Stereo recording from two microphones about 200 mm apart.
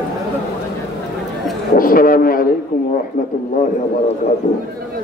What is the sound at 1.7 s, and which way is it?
Speech, 45° left (ahead or behind).